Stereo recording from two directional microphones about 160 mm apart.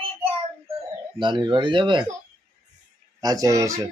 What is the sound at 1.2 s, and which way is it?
Speech, 30° right (ahead or behind).